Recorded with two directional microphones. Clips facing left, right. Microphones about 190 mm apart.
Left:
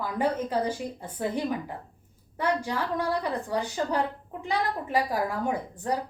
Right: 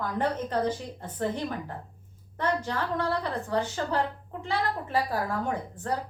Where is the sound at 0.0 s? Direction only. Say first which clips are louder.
Left 1 dB; 10° left (ahead or behind).